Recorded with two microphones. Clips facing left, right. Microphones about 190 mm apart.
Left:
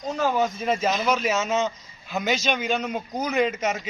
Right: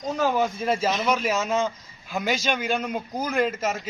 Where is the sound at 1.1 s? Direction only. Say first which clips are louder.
Even; 10° right (ahead or behind).